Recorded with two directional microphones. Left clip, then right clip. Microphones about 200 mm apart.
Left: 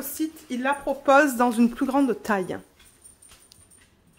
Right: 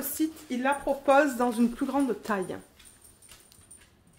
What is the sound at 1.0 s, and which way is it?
Speech, 30° left (ahead or behind).